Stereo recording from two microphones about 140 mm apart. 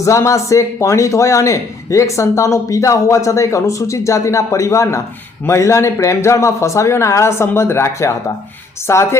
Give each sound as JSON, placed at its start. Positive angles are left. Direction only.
{"t": 0.0, "sound": "speech", "side_deg": 20}